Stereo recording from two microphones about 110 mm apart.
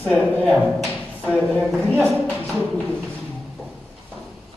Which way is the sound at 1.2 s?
15° left (ahead or behind).